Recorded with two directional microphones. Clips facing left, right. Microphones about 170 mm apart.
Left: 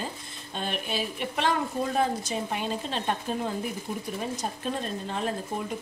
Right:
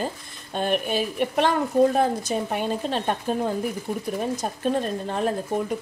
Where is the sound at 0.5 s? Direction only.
50° right (ahead or behind).